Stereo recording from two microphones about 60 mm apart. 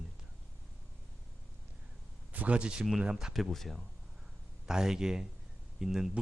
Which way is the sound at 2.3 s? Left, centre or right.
Right.